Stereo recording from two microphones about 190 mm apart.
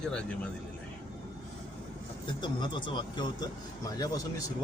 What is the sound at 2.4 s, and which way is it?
Speech, 25° left (ahead or behind).